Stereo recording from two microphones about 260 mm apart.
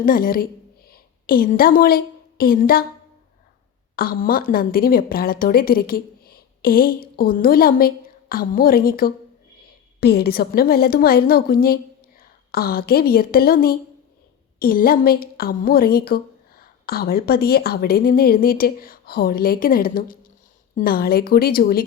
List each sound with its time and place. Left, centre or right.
0.0 s a woman's voice: left
3.9 s a woman's voice: left